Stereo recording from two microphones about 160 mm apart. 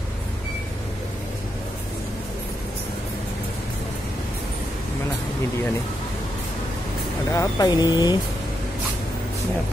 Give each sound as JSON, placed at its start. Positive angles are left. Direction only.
{"t": 7.2, "sound": "speech", "side_deg": 20}